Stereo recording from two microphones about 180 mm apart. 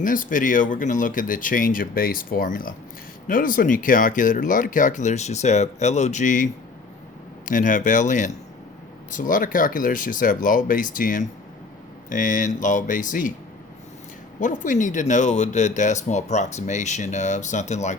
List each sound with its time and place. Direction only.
0.0 s speech: 50° left (ahead or behind)
14.3 s speech: 45° left (ahead or behind)